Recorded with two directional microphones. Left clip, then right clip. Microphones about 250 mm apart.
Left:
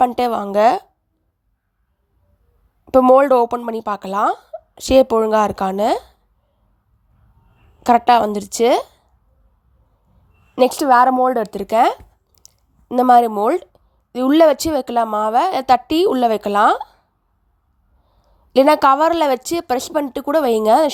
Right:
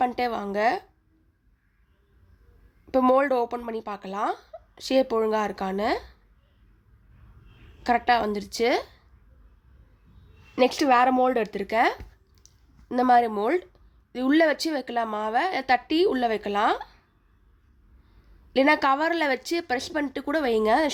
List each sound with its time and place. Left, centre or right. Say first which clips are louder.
0.0 s a woman's voice: left 9 dB; left
2.8 s a woman's voice: left 10 dB; left
7.9 s a woman's voice: left 10 dB; left
10.5 s a woman's voice: left 7 dB; left
18.5 s a woman's voice: left 9 dB; left